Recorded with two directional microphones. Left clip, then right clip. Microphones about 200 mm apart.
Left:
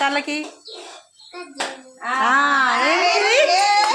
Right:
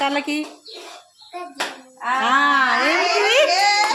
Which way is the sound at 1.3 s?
15° right (ahead or behind).